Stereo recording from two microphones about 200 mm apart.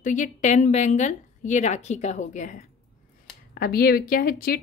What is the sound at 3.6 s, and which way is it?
Speech, 50° left (ahead or behind).